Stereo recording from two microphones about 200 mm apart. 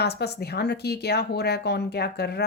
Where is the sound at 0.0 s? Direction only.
55° left (ahead or behind).